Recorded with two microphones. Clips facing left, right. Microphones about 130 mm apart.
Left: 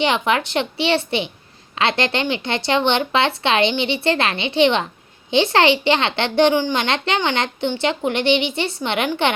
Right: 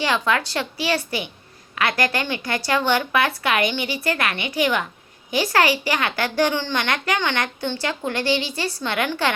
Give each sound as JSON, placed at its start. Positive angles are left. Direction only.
{"t": 0.0, "sound": "a child's voice", "side_deg": 20}